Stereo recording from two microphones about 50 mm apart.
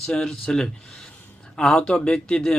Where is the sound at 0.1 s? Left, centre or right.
Centre.